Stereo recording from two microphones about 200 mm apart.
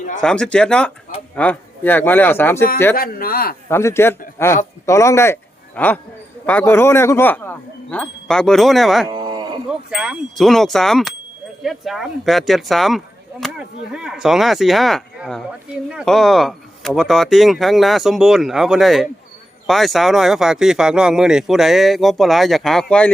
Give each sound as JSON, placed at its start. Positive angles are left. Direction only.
{"t": 0.2, "sound": "speech", "side_deg": 5}
{"t": 2.9, "sound": "a man's voice", "side_deg": 45}
{"t": 3.7, "sound": "speech", "side_deg": 15}
{"t": 9.0, "sound": "cattle", "side_deg": -20}
{"t": 9.6, "sound": "speech", "side_deg": -5}